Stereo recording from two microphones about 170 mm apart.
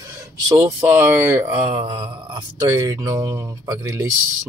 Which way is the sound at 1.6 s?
25° right (ahead or behind).